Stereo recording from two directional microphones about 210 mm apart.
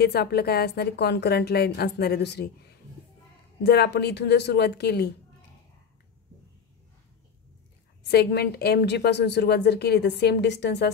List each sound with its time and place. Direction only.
0.0 s speech: 50° left (ahead or behind)
8.0 s speech: 50° left (ahead or behind)